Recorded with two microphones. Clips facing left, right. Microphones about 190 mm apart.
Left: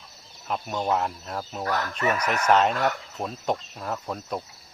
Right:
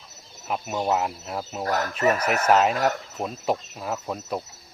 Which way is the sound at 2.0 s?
35° right (ahead or behind).